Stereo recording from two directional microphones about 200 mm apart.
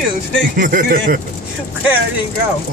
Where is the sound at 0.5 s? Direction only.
45° right (ahead or behind).